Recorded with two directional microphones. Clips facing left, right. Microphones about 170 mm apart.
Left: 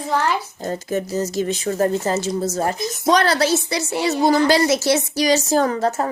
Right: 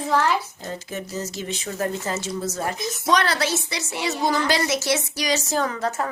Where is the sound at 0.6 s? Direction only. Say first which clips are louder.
Left 8 dB; 40° left (ahead or behind).